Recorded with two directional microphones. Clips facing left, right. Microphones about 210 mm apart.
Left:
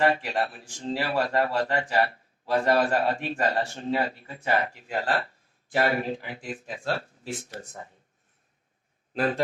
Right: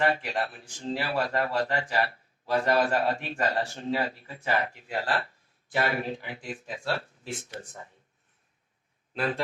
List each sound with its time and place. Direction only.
0.0 s speech: 35° left (ahead or behind)
9.1 s speech: 40° left (ahead or behind)